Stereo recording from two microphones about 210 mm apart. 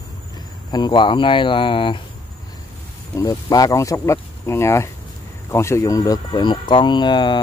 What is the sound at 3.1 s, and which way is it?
Speech, 15° left (ahead or behind).